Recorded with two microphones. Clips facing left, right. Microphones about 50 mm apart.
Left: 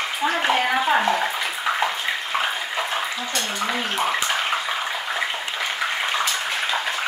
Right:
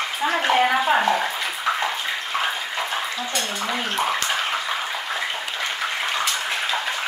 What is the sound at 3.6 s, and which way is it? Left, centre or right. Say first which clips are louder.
Speech: left 1 dB; centre.